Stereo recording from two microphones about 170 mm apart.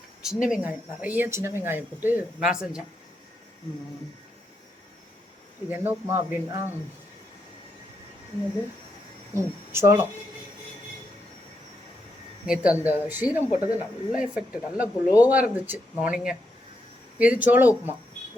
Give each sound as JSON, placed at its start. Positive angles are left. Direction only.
{"t": 0.4, "sound": "speech", "side_deg": -5}
{"t": 5.6, "sound": "speech", "side_deg": -10}
{"t": 9.3, "sound": "speech", "side_deg": -15}
{"t": 12.5, "sound": "speech", "side_deg": -10}